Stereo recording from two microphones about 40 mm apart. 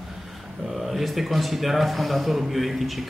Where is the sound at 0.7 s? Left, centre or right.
Centre.